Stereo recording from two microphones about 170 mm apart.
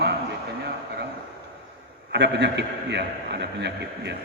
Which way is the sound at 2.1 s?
90° right.